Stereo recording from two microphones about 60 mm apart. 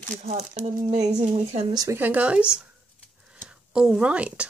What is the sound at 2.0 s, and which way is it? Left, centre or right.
Speech, right.